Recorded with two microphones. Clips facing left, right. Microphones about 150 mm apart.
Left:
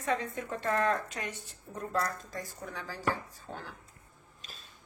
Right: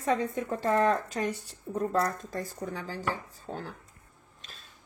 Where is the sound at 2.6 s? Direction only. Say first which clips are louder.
Left 2 dB; 30° right (ahead or behind).